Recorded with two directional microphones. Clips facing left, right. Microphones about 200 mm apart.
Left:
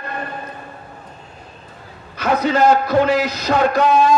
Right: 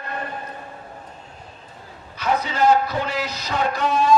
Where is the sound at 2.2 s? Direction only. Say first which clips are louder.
Left 5 dB; 90° left.